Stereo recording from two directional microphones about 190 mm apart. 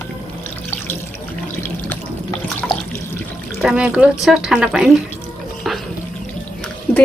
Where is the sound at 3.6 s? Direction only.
5° right (ahead or behind).